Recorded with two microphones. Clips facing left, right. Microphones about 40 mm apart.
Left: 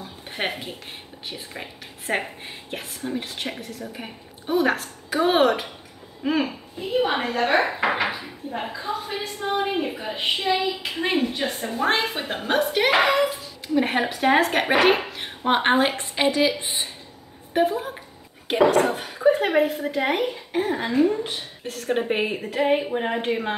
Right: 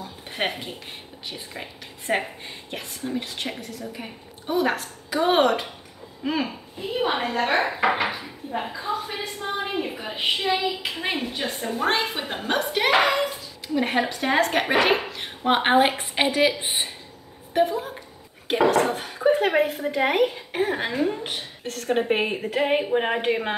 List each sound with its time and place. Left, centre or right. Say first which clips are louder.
0.3 s a woman's voice: even; centre
16.2 s speech: left 1 dB; right
17.6 s a woman's voice: even; centre
20.5 s speech: left 3 dB; right
21.6 s speech: even; centre
21.9 s a woman's voice: right 1 dB; centre